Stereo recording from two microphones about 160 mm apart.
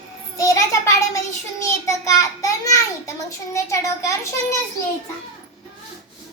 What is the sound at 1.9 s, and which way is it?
A child's voice, 20° left (ahead or behind).